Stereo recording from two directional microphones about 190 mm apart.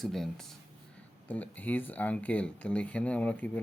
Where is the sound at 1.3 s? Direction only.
10° left (ahead or behind).